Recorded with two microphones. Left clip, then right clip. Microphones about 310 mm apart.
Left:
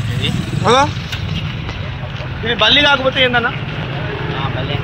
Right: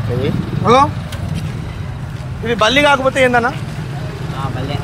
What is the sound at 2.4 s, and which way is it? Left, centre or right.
Speech, centre.